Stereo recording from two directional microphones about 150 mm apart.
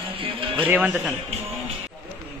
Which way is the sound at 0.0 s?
35° right (ahead or behind).